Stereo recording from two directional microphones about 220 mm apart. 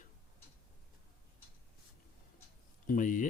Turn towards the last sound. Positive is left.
turn(degrees=35)  # may be behind; listen again after turning